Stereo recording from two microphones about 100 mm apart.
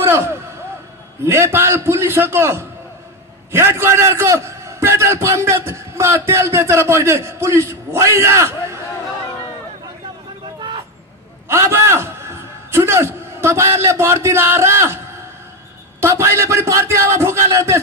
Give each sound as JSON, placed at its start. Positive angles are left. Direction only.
{"t": 0.0, "sound": "a sound", "side_deg": -25}
{"t": 1.2, "sound": "a man's voice", "side_deg": -25}
{"t": 11.4, "sound": "a man's voice", "side_deg": -25}
{"t": 16.0, "sound": "a man's voice", "side_deg": -25}